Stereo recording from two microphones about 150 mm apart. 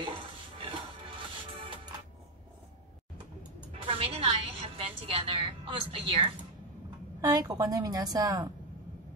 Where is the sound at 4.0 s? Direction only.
40° right (ahead or behind).